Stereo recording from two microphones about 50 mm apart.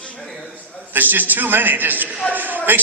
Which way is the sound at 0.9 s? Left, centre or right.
Right.